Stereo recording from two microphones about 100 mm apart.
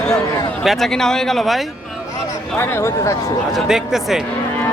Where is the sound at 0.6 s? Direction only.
Centre (ahead or behind).